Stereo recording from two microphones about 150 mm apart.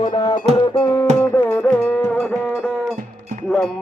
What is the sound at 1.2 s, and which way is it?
Music, 10° left (ahead or behind).